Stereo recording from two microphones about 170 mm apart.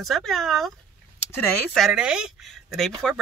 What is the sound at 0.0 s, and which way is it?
Speech, centre (ahead or behind).